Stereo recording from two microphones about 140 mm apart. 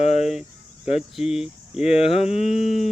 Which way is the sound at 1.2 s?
5° right (ahead or behind).